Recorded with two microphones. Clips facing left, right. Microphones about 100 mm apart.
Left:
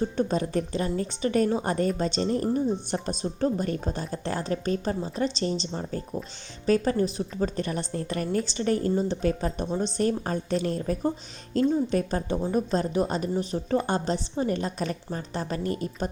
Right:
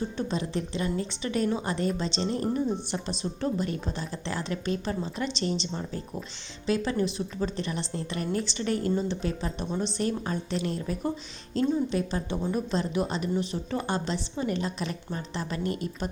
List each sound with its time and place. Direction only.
0.2 s a woman's voice: 45° left (ahead or behind)
2.2 s speech: 30° right (ahead or behind)
2.5 s a woman's voice: 40° left (ahead or behind)